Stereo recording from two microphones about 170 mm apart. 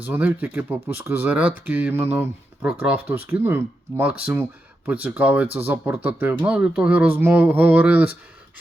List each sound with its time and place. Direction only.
0.0 s speech: 10° right (ahead or behind)